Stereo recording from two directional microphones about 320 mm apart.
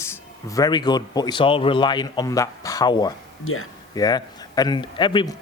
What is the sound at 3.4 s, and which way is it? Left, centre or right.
Speech, left.